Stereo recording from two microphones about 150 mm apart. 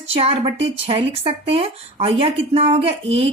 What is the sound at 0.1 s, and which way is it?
A woman's voice, 40° right (ahead or behind).